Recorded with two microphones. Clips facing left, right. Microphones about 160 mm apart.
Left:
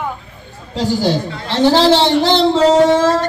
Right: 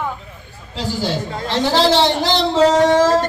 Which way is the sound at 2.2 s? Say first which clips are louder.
Left 3 dB; 25° left (ahead or behind).